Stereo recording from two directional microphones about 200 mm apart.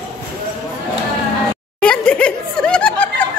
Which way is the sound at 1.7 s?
5° left (ahead or behind).